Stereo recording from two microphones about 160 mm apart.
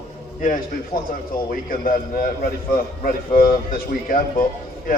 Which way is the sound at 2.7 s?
65° left (ahead or behind).